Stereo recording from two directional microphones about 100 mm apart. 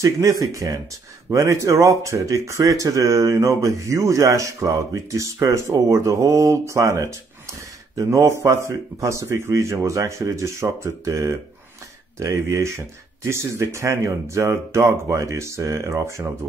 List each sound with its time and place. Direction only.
0.0 s speech: 35° right (ahead or behind)